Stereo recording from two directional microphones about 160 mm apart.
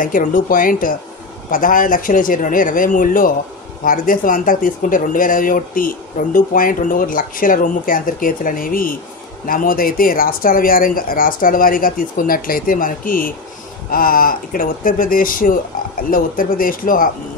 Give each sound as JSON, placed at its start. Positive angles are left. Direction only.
{"t": 0.0, "sound": "speech", "side_deg": 60}